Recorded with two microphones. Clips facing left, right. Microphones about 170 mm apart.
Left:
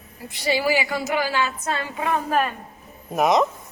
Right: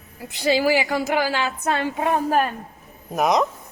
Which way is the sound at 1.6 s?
55° right (ahead or behind).